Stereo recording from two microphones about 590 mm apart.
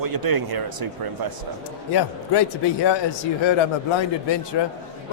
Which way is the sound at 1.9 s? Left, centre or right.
Left.